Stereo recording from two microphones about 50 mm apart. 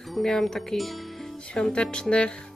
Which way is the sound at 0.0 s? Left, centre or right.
Centre.